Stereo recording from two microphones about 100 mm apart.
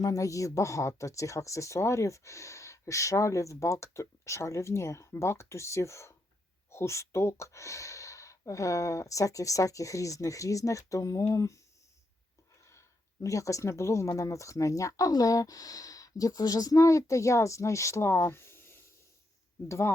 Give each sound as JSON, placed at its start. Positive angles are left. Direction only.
{"t": 0.0, "sound": "speech", "side_deg": 35}
{"t": 13.2, "sound": "speech", "side_deg": 35}